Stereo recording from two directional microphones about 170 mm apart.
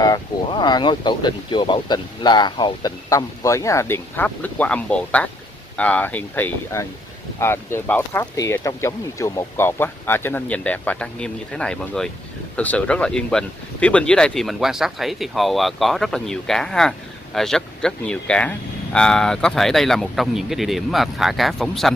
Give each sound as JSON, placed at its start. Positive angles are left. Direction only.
{"t": 0.0, "sound": "speech", "side_deg": 25}